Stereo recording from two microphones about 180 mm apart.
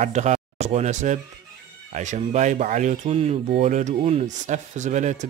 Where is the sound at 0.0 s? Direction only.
40° right (ahead or behind).